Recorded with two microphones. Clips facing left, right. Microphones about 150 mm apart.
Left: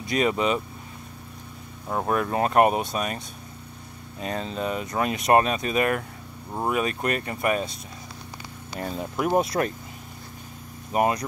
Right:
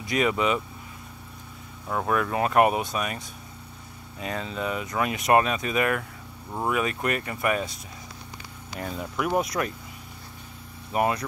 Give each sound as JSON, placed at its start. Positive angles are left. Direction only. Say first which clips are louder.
{"t": 0.0, "sound": "speech", "louder": "left 1 dB", "side_deg": 25}
{"t": 1.9, "sound": "speech", "louder": "left 1 dB", "side_deg": 25}
{"t": 4.2, "sound": "speech", "louder": "left 2 dB", "side_deg": 30}
{"t": 8.9, "sound": "speech", "louder": "left 3 dB", "side_deg": 25}
{"t": 10.9, "sound": "speech", "louder": "left 2 dB", "side_deg": 25}